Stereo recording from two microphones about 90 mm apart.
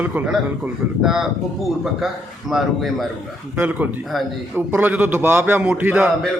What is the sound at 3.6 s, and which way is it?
A man's voice, 20° right (ahead or behind).